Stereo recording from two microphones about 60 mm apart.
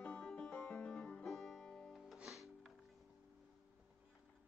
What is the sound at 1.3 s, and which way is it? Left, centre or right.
Music, centre.